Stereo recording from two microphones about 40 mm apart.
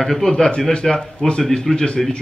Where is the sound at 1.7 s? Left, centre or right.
Left.